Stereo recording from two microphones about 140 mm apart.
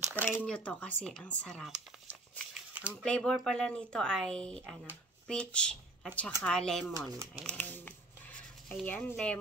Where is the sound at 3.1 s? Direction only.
5° left (ahead or behind).